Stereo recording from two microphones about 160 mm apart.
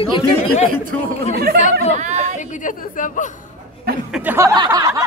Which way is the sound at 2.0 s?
50° right (ahead or behind).